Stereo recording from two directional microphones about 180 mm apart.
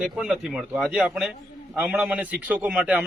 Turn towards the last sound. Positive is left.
turn(degrees=-5)  # may be behind; listen again after turning